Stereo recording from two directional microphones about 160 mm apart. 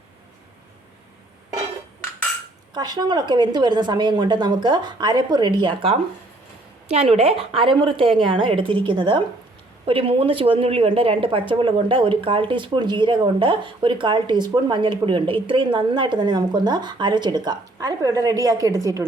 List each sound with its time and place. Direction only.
2.7 s a woman's voice: 25° right (ahead or behind)